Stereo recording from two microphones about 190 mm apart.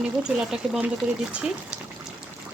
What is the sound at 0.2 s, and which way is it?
Speech, 5° right (ahead or behind).